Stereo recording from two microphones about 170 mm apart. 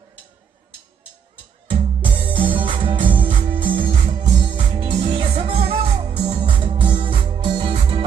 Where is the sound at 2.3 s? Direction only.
30° right (ahead or behind).